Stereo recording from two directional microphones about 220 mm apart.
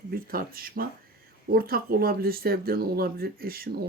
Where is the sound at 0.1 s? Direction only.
40° right (ahead or behind).